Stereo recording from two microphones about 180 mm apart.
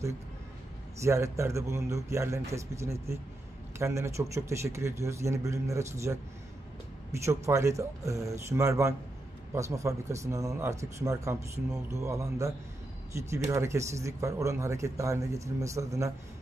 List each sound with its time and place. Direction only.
1.0 s speech: 15° right (ahead or behind)